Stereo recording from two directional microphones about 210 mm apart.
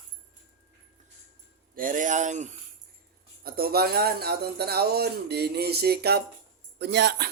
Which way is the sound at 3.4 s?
45° right (ahead or behind).